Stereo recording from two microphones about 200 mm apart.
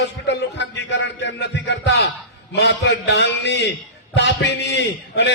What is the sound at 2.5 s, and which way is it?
A man's voice, 60° left (ahead or behind).